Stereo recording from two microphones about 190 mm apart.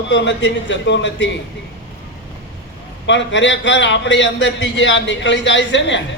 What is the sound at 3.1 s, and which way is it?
A man's voice, 70° left (ahead or behind).